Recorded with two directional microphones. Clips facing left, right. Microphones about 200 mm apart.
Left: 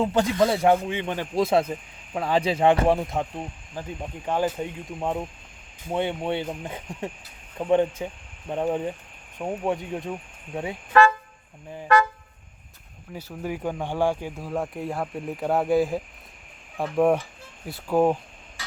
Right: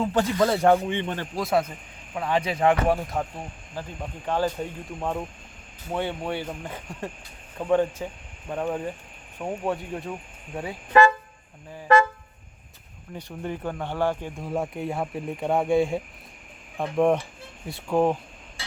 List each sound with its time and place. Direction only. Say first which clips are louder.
0.1 s speech: left 1 dB; 10° left (ahead or behind)
1.4 s speech: left 4 dB; 25° left (ahead or behind)
13.1 s speech: left 1 dB; 5° left (ahead or behind)